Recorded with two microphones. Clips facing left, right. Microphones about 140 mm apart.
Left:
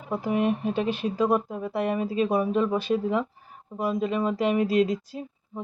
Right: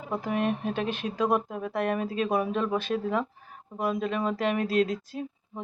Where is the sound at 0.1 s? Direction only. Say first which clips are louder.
Left 3 dB; 10° left (ahead or behind).